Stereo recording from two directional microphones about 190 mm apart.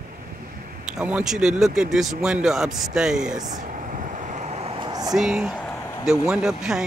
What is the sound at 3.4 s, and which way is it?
Vehicle, 40° right (ahead or behind).